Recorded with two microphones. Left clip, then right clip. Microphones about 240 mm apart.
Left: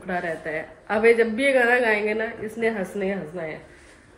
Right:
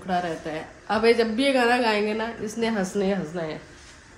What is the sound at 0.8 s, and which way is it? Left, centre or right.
A woman's voice, centre.